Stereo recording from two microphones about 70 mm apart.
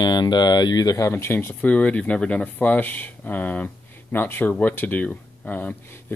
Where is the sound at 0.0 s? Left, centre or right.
Left.